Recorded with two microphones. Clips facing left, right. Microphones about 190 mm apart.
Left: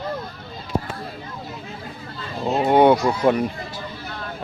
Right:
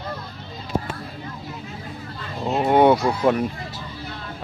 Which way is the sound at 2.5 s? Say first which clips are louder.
Left 1 dB; centre (ahead or behind).